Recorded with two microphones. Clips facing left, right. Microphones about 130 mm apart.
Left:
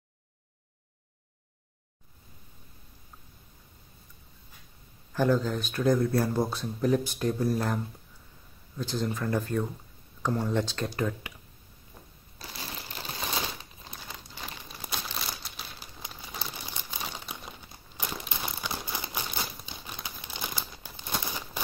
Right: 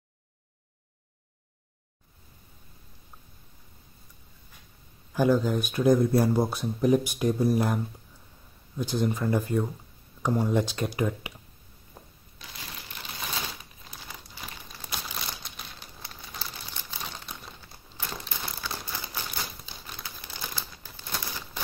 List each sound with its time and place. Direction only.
5.1 s speech: 10° right (ahead or behind)
12.0 s a sound: 25° right (ahead or behind)
12.4 s shuffling cards: 35° left (ahead or behind)
14.9 s crumpling: centre (ahead or behind); by 21.5 s 20° left (ahead or behind)